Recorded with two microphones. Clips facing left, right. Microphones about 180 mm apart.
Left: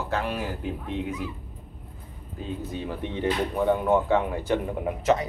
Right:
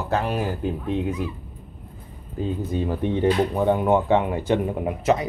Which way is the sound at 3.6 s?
25° right (ahead or behind).